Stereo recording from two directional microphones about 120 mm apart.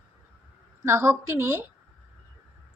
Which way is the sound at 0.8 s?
20° right (ahead or behind).